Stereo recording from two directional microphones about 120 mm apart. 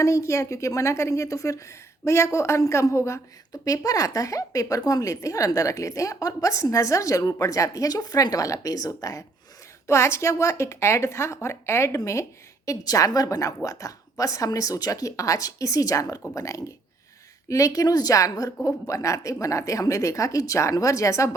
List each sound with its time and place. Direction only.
0.0 s a woman's voice: 25° left (ahead or behind)